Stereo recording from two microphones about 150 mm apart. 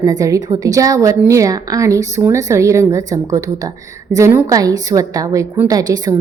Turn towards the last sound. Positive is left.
turn(degrees=-25)  # may be behind; listen again after turning